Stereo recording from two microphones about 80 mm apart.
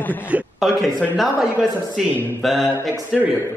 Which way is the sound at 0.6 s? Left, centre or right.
Centre.